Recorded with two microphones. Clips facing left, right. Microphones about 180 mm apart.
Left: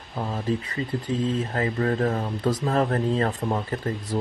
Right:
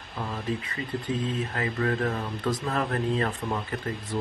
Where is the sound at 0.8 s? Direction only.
30° left (ahead or behind).